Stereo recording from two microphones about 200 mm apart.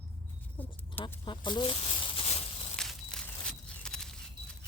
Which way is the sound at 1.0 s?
25° left (ahead or behind).